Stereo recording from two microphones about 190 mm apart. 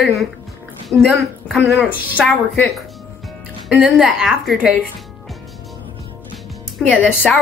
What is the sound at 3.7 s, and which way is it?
A woman's voice, 5° right (ahead or behind).